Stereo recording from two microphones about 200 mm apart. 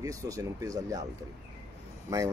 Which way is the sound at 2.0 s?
15° right (ahead or behind).